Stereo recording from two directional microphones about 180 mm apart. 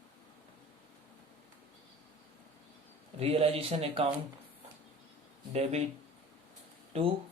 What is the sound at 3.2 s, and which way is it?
Speech, 35° right (ahead or behind).